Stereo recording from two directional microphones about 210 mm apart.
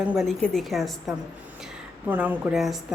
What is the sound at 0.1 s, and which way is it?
A woman's voice, centre (ahead or behind).